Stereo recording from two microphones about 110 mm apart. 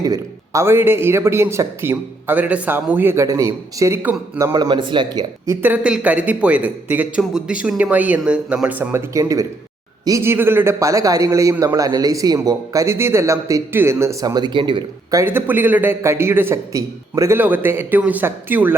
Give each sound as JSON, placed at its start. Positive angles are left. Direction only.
{"t": 0.0, "sound": "a man's voice", "side_deg": -35}
{"t": 0.6, "sound": "a man's voice", "side_deg": -20}
{"t": 4.5, "sound": "a man's voice", "side_deg": -40}
{"t": 5.5, "sound": "a man's voice", "side_deg": -15}
{"t": 15.1, "sound": "a man's voice", "side_deg": -20}